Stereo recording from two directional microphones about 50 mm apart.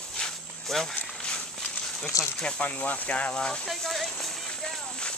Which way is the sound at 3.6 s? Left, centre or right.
Centre.